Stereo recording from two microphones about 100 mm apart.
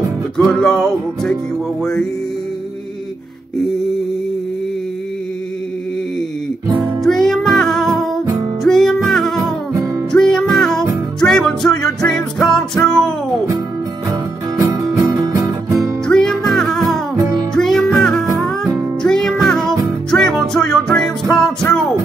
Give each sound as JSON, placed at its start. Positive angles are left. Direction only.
{"t": 0.5, "sound": "music", "side_deg": 5}
{"t": 7.0, "sound": "music", "side_deg": 5}
{"t": 14.6, "sound": "music", "side_deg": -35}
{"t": 16.1, "sound": "music", "side_deg": 5}